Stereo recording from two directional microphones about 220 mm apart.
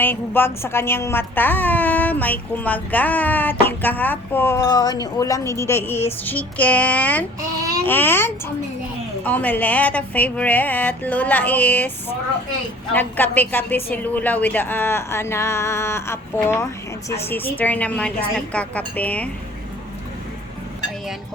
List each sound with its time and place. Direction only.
0.0 s a woman's voice: 10° left (ahead or behind)